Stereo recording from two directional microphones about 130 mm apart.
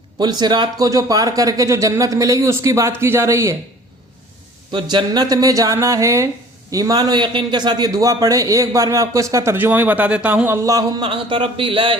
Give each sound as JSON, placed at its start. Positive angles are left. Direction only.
{"t": 0.2, "sound": "a man's voice", "side_deg": -35}
{"t": 4.7, "sound": "a man's voice", "side_deg": -35}
{"t": 11.1, "sound": "speech", "side_deg": -40}